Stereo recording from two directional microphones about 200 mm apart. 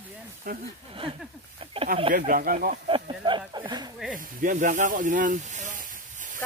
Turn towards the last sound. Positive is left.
turn(degrees=-40)  # may be behind; listen again after turning